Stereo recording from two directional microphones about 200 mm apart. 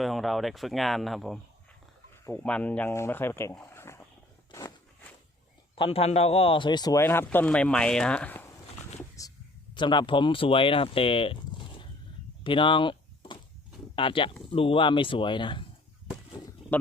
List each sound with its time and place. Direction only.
0.0 s a man's voice: centre (ahead or behind)
5.7 s a man's voice: 25° left (ahead or behind); by 8.4 s 5° left (ahead or behind)
9.0 s a sound: 15° left (ahead or behind)
9.7 s speech: 25° left (ahead or behind)
12.4 s door: 25° left (ahead or behind)
13.9 s speech: 25° left (ahead or behind)